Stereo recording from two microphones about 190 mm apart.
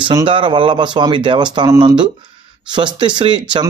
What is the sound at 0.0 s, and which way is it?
A man's voice, 25° right (ahead or behind).